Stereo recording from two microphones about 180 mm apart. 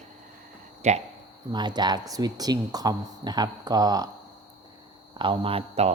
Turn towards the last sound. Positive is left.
turn(degrees=-35)  # may be behind; listen again after turning